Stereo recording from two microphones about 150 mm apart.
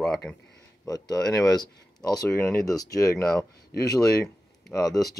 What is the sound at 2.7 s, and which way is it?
Speech, 25° left (ahead or behind).